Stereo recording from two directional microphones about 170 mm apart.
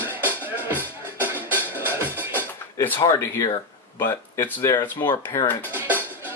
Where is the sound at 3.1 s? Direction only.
20° left (ahead or behind).